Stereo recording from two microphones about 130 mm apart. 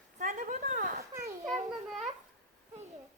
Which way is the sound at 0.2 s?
80° right.